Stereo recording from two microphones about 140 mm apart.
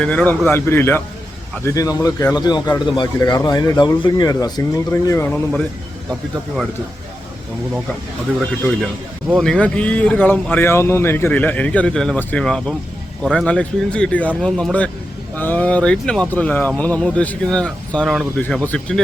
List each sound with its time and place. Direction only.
0.0 s a man's voice: 10° left (ahead or behind)
9.3 s a man's voice: 5° left (ahead or behind)